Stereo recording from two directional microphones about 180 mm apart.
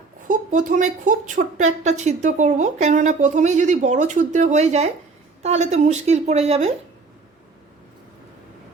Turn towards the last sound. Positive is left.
turn(degrees=-35)  # may be behind; listen again after turning